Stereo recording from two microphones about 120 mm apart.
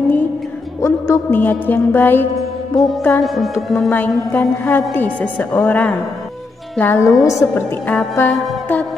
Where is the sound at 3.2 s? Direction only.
Centre (ahead or behind).